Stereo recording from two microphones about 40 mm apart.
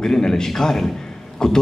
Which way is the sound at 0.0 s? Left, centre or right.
Centre.